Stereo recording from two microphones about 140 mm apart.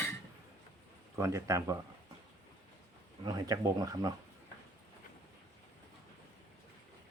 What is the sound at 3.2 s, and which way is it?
Cutlery, 30° right (ahead or behind).